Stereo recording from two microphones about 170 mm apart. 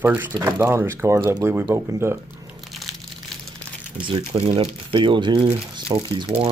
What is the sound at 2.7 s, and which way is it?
Crumpling, centre (ahead or behind).